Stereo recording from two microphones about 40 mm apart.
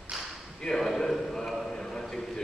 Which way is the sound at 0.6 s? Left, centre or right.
Centre.